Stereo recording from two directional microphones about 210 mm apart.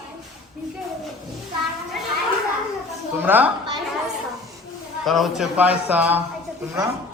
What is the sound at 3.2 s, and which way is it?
Speech, 10° right (ahead or behind).